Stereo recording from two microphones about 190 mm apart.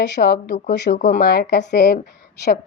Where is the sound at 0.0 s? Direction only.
60° left (ahead or behind).